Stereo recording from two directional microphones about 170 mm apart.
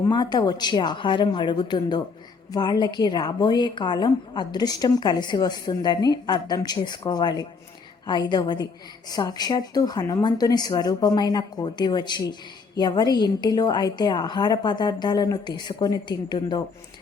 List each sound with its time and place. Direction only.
0.1 s speech: 25° left (ahead or behind)